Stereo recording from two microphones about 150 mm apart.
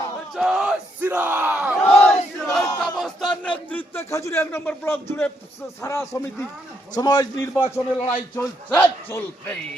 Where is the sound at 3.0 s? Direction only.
Centre (ahead or behind).